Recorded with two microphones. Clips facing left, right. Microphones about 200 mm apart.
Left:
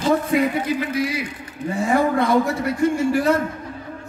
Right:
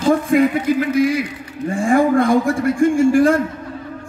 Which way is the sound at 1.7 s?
50° right (ahead or behind).